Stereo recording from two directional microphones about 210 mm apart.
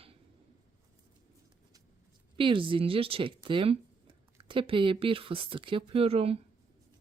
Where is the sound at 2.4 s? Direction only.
25° right (ahead or behind).